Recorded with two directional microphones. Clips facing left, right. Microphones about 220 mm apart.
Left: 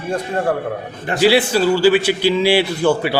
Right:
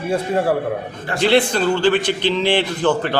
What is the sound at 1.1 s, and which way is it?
A man's voice, 5° left (ahead or behind).